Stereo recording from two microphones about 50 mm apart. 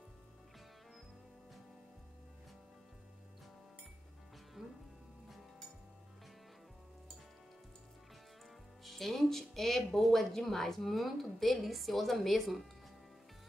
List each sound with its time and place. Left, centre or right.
4.6 s music: centre
8.8 s speech: centre